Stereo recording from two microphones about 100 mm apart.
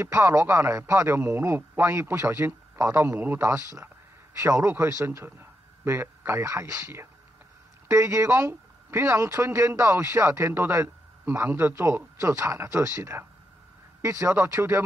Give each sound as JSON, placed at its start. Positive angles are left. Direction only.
{"t": 0.0, "sound": "a man's voice", "side_deg": -25}